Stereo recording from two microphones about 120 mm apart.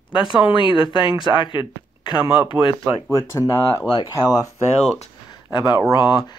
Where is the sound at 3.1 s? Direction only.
20° left (ahead or behind).